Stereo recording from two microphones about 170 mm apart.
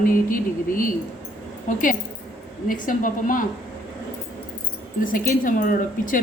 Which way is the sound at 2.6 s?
50° left (ahead or behind).